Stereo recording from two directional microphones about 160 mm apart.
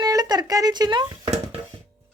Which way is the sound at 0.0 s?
25° right (ahead or behind).